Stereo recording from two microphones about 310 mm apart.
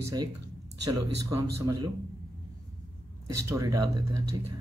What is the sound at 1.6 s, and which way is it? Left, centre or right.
Speech, centre.